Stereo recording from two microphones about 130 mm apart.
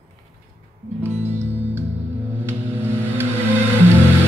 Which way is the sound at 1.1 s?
60° right (ahead or behind).